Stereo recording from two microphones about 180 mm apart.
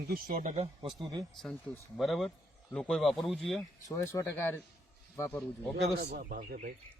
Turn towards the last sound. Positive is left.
turn(degrees=-60)  # may be behind; listen again after turning